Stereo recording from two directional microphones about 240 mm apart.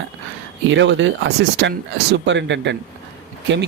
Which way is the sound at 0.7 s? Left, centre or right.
Right.